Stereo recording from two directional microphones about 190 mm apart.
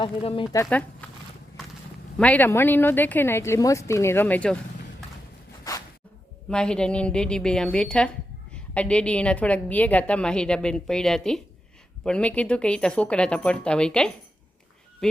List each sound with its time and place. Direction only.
0.0 s speech: 25° left (ahead or behind)
0.5 s speech: 10° left (ahead or behind)
2.1 s speech: 5° left (ahead or behind)
6.5 s a woman's voice: 5° left (ahead or behind)